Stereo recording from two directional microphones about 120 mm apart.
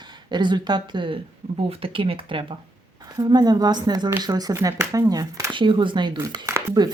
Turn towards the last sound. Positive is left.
turn(degrees=-30)  # may be behind; listen again after turning